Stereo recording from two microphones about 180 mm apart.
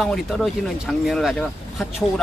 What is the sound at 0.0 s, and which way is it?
Speech, centre (ahead or behind).